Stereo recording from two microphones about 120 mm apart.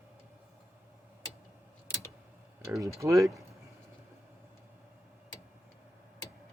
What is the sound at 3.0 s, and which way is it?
Speech, 25° right (ahead or behind).